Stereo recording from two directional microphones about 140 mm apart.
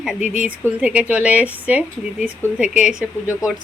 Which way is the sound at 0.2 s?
55° left (ahead or behind).